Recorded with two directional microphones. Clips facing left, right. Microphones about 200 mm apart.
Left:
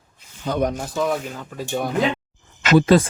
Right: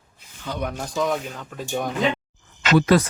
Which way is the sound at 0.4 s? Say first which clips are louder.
Left 7 dB; 45° left (ahead or behind).